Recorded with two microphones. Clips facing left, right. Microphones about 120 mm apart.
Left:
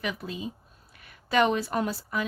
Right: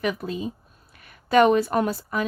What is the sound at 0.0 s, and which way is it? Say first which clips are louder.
Speech: right 6 dB; 50° right (ahead or behind).